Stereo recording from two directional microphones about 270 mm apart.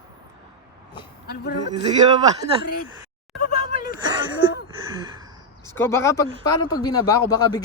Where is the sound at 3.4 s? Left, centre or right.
Left.